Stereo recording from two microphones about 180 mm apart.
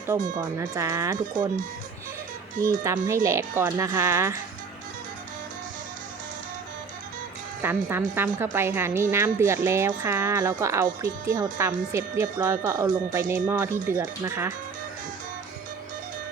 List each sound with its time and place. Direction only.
0.3 s speech: 20° right (ahead or behind)
2.6 s speech: 15° right (ahead or behind)
7.6 s speech: 10° right (ahead or behind)